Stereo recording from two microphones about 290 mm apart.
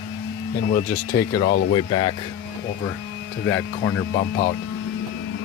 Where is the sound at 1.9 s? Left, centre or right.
Left.